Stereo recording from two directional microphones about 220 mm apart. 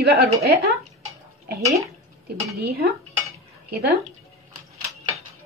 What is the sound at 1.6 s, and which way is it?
Speech, 15° right (ahead or behind).